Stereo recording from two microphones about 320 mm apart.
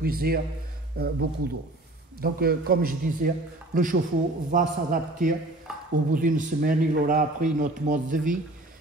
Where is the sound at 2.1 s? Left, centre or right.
Right.